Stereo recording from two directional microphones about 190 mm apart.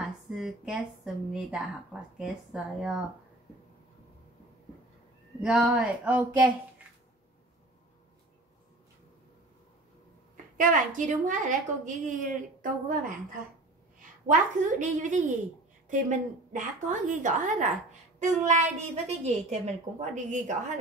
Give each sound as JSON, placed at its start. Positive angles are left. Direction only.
{"t": 0.3, "sound": "speech", "side_deg": -5}
{"t": 5.4, "sound": "speech", "side_deg": -5}
{"t": 10.3, "sound": "a woman's voice", "side_deg": -45}